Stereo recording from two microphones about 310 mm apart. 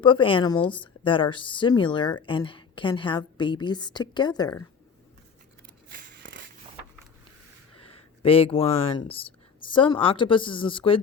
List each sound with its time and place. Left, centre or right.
0.0 s a woman's voice: centre
5.9 s a sound: right
7.8 s a woman's voice: centre